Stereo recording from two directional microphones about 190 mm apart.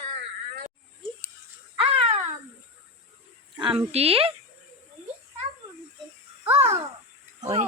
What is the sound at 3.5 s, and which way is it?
Speech, 25° right (ahead or behind).